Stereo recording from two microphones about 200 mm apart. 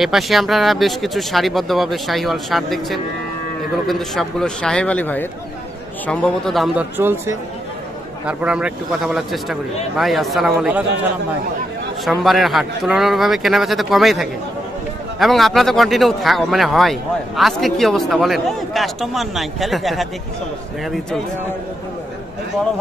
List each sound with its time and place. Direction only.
0.0 s speech: centre (ahead or behind)
12.0 s speech: centre (ahead or behind)